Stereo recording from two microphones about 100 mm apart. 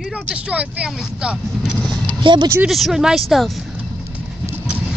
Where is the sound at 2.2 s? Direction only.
50° right (ahead or behind).